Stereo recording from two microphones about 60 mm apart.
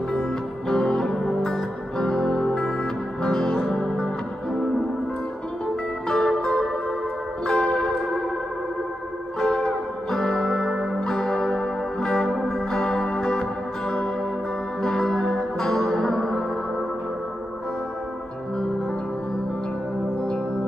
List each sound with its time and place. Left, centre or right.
0.1 s music: centre
6.0 s music: centre
9.4 s music: centre